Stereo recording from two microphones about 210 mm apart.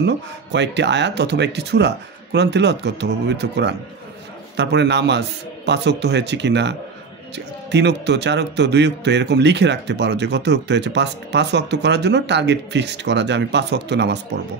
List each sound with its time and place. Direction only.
0.0 s speech: 55° right (ahead or behind)